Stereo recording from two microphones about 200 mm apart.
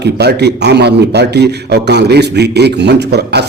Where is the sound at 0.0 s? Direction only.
55° right (ahead or behind).